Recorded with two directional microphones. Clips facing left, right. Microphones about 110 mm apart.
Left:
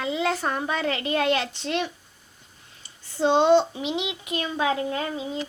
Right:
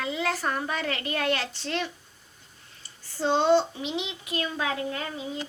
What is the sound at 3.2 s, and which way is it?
A woman's voice, 20° left (ahead or behind).